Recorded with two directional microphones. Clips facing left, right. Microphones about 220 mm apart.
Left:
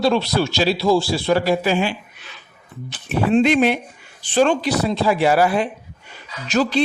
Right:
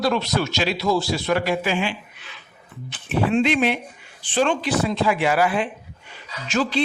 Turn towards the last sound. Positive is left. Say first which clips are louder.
# left 4 dB
turn(degrees=40)  # may be behind; listen again after turning